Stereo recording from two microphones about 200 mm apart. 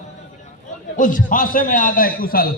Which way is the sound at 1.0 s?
40° left (ahead or behind).